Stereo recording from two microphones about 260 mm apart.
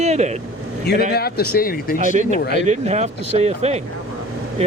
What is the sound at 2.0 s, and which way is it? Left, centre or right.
Speech, right.